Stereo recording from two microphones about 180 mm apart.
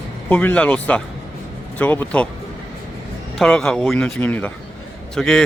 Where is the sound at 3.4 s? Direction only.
5° left (ahead or behind).